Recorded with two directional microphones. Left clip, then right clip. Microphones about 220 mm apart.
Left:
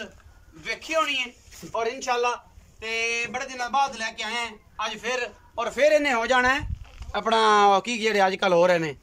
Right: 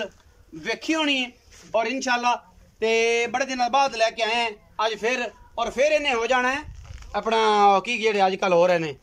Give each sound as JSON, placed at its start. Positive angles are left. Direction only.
{"t": 0.7, "sound": "speech", "side_deg": -40}
{"t": 5.5, "sound": "speech", "side_deg": -15}